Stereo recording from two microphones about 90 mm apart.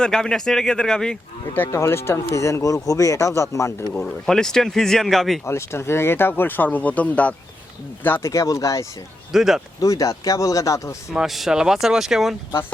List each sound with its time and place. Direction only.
0.0 s speech: 5° left (ahead or behind)
1.5 s speech: 25° left (ahead or behind)
4.3 s speech: 5° left (ahead or behind)
5.5 s speech: 30° left (ahead or behind)
8.3 s speech: 40° left (ahead or behind)
9.3 s speech: 5° right (ahead or behind)
9.8 s speech: 40° left (ahead or behind)
11.1 s speech: 5° right (ahead or behind)